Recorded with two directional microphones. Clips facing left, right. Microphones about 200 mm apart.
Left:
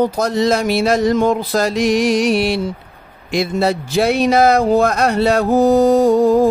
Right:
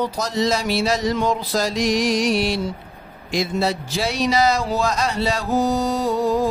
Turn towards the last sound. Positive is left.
turn(degrees=50)  # may be behind; listen again after turning